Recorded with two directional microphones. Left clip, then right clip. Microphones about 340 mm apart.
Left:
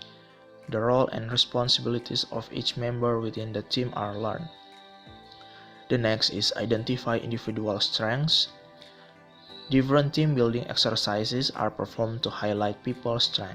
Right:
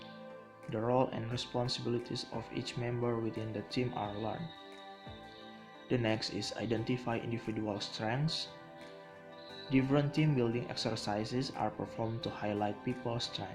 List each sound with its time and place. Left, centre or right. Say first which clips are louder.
0.7 s speech: left 8 dB; centre
5.9 s speech: left 9 dB; centre
9.9 s speech: left 8 dB; centre